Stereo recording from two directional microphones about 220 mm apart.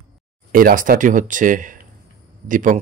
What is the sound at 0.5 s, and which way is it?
Speech, 40° right (ahead or behind).